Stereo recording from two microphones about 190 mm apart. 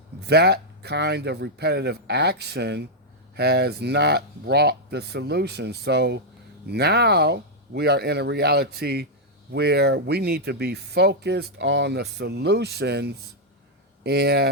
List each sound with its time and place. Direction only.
0.2 s speech: 60° right (ahead or behind)